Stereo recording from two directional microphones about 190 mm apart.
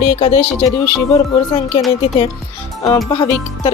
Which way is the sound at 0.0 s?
30° left (ahead or behind).